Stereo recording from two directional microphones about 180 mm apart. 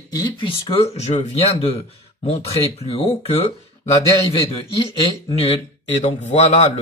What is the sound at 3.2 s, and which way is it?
Speech, 35° left (ahead or behind).